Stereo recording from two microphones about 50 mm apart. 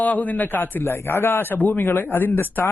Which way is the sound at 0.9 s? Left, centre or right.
Left.